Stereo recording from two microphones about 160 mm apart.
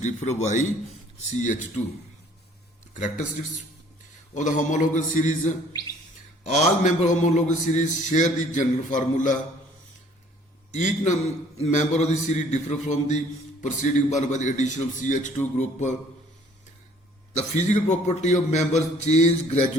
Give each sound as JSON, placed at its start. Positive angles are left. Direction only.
{"t": 0.0, "sound": "a man's voice", "side_deg": 45}
{"t": 2.9, "sound": "speech", "side_deg": 50}
{"t": 4.4, "sound": "a man's voice", "side_deg": 50}
{"t": 11.0, "sound": "a man's voice", "side_deg": 45}
{"t": 17.3, "sound": "a man's voice", "side_deg": 45}